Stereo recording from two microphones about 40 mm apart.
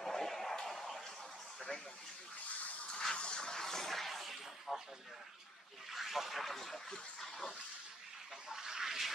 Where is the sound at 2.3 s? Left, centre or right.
Left.